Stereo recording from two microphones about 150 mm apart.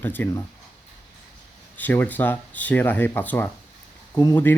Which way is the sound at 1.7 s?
10° left (ahead or behind).